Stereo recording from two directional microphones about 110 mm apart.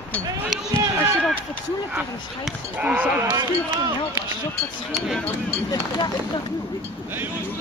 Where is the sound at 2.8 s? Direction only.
15° right (ahead or behind).